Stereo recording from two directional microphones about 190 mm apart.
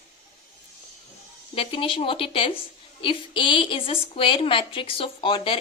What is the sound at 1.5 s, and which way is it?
A woman's voice, 30° left (ahead or behind).